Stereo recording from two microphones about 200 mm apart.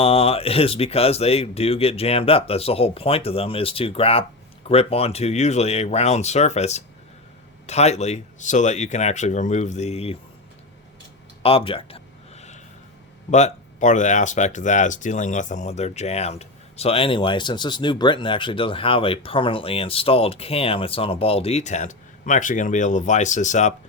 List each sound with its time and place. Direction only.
0.0 s speech: 30° left (ahead or behind)
11.4 s a sound: 30° left (ahead or behind)
13.3 s speech: 35° left (ahead or behind)